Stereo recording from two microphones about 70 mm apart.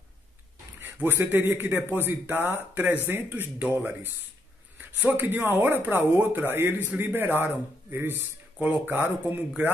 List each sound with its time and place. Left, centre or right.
1.0 s speech: right